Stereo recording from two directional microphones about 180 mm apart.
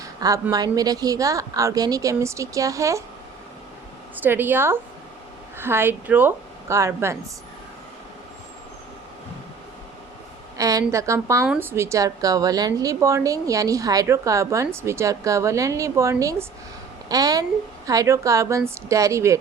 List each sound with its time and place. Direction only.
0.0 s a sound: 20° right (ahead or behind)
0.5 s a woman's voice: 20° right (ahead or behind)
4.1 s a woman's voice: 10° right (ahead or behind)
10.6 s a woman's voice: 20° right (ahead or behind)